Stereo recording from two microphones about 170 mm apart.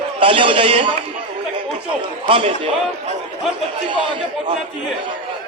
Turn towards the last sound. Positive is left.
turn(degrees=-30)  # may be behind; listen again after turning